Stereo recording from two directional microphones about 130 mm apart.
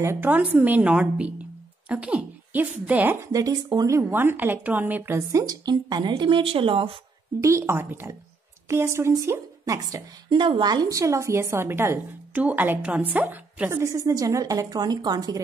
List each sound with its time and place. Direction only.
0.0 s speech: 20° right (ahead or behind)
3.3 s a woman's voice: 25° right (ahead or behind)
5.4 s a woman's voice: 30° right (ahead or behind)
7.3 s a woman's voice: 20° right (ahead or behind)